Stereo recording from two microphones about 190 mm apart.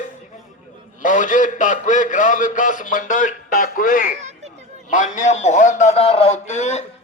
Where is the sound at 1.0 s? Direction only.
40° left (ahead or behind).